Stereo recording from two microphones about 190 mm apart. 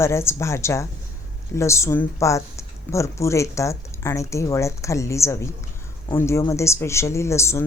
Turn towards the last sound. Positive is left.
turn(degrees=15)  # may be behind; listen again after turning